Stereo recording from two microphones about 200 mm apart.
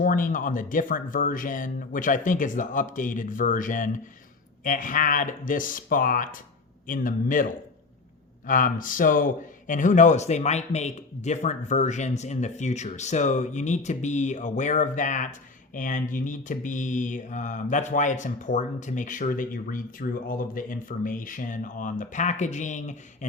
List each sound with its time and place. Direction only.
0.0 s speech: 45° left (ahead or behind)
8.4 s mantra: 45° left (ahead or behind)